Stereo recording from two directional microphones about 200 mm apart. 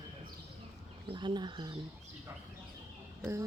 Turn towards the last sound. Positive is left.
turn(degrees=-15)  # may be behind; listen again after turning